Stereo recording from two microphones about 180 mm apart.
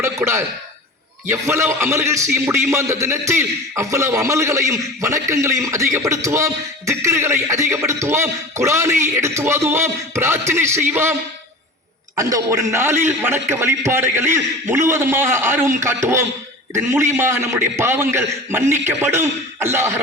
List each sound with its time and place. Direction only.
0.0 s a man's voice: 15° right (ahead or behind)
12.1 s a man's voice: 20° right (ahead or behind)